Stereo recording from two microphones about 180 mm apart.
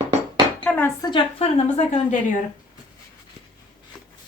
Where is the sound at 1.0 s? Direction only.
30° left (ahead or behind).